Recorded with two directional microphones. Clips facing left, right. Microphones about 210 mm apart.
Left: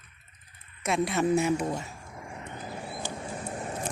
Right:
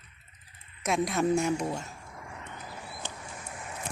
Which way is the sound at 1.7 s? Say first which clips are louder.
Left 2 dB; 10° left (ahead or behind).